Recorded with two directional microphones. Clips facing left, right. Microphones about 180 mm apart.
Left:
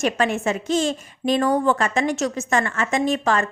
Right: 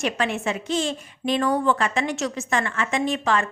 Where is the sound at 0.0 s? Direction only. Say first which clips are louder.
Left 4 dB; 45° left (ahead or behind).